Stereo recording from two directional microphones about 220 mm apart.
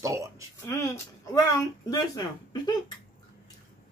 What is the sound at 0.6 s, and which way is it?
A man's voice, 15° left (ahead or behind).